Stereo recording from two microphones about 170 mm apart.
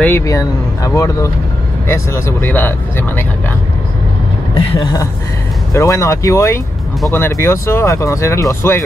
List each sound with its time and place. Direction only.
0.0 s speech: 15° left (ahead or behind)
5.7 s speech: 15° left (ahead or behind)